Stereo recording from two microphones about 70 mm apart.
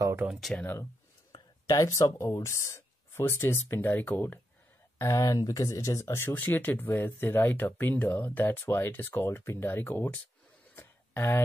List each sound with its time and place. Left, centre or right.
0.5 s speech: centre
1.7 s speech: left
4.9 s speech: left
6.3 s speech: left
10.8 s a sound: left